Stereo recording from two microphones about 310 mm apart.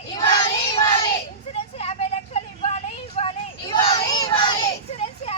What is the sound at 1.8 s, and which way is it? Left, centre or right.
Vehicle, centre.